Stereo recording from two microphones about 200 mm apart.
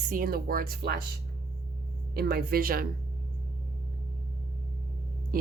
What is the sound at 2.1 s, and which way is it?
Speech, 50° right (ahead or behind).